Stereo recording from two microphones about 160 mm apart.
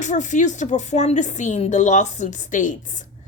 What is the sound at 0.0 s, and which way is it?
Speech, 50° left (ahead or behind).